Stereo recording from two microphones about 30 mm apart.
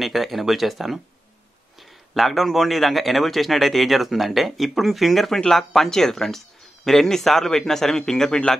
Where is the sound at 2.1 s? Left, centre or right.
Centre.